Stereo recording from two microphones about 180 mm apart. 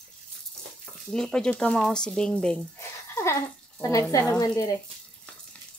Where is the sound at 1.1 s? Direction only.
5° left (ahead or behind).